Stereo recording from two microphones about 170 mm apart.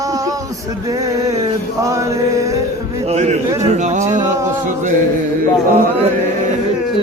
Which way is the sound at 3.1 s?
40° right (ahead or behind).